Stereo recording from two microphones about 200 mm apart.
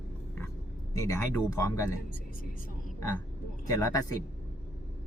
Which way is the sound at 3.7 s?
20° left (ahead or behind).